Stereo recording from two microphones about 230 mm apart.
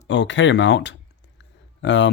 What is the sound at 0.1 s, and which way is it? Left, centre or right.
Speech, left.